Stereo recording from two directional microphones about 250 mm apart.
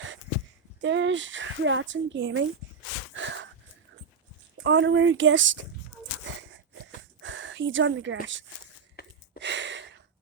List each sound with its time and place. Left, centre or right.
0.8 s speech: right
3.2 s wheeze: right
4.6 s speech: right
6.3 s a sound: right
7.2 s speech: right
9.0 s gasp: left
9.4 s a sound: right